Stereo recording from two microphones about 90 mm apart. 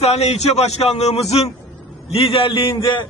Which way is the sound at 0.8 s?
90° left.